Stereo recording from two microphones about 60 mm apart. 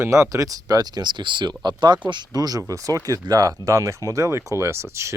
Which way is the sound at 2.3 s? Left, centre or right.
Right.